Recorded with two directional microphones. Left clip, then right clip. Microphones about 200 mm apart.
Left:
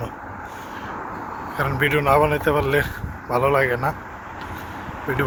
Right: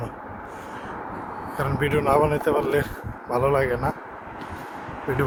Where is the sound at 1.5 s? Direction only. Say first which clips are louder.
Left 3 dB; 15° right (ahead or behind).